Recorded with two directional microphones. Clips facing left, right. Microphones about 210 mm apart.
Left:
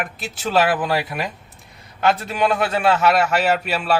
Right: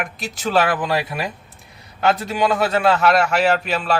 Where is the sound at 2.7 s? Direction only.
Centre (ahead or behind).